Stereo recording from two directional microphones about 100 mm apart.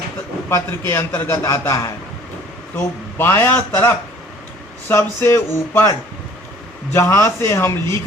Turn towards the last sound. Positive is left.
turn(degrees=30)  # may be behind; listen again after turning